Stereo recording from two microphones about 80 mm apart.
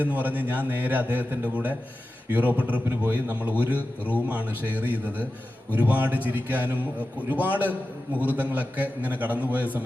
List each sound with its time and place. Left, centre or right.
0.0 s a man's voice: right